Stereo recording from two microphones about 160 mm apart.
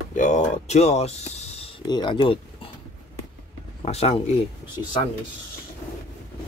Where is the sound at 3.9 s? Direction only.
40° left (ahead or behind).